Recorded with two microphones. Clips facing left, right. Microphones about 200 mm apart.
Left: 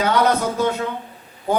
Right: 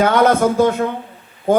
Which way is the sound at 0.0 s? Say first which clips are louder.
Right 5 dB; 50° right (ahead or behind).